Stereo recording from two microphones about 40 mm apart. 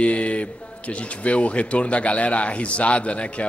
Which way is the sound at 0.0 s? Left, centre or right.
Left.